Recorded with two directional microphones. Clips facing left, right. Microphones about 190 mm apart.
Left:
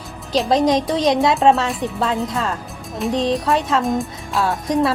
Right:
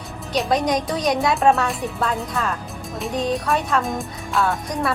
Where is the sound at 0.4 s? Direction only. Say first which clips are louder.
Left 5 dB; 25° left (ahead or behind).